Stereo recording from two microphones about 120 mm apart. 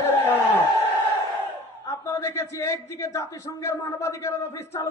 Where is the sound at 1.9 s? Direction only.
25° left (ahead or behind).